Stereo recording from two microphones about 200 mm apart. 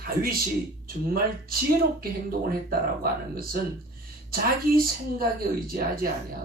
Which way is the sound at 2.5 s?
50° right (ahead or behind).